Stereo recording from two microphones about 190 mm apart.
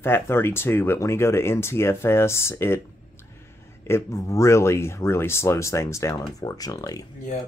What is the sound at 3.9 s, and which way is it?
Speech, 15° left (ahead or behind).